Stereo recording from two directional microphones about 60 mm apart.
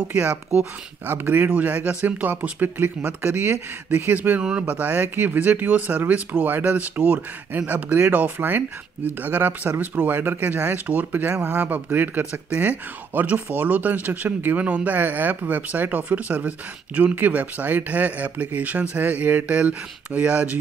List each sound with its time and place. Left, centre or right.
0.1 s a man's voice: right
1.0 s a man's voice: right
4.4 s a man's voice: centre